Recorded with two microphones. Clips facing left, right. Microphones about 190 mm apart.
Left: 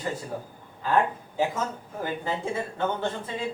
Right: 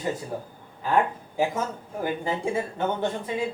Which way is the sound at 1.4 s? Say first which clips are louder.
Right 1 dB; 15° right (ahead or behind).